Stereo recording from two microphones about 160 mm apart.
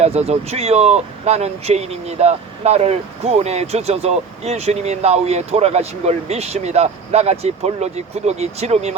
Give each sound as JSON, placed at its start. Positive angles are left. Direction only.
{"t": 0.0, "sound": "speech", "side_deg": -40}